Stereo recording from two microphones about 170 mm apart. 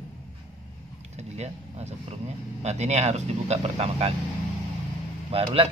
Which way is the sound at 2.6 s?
40° right (ahead or behind).